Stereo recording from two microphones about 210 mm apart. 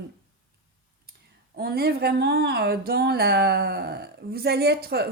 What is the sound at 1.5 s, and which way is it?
Speech, 45° right (ahead or behind).